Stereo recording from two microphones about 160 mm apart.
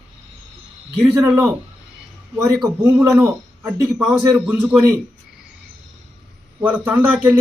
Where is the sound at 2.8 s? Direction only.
15° right (ahead or behind).